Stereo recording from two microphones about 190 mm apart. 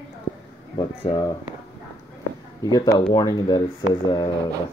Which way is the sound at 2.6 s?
20° left (ahead or behind).